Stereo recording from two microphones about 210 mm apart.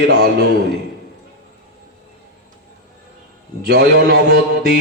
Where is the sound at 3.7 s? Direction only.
50° right (ahead or behind).